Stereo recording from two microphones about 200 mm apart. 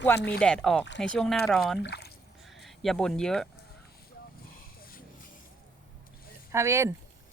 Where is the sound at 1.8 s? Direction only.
55° left (ahead or behind).